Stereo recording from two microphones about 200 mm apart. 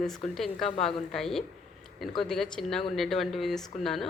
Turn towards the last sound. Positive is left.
turn(degrees=0)  # may be behind; listen again after turning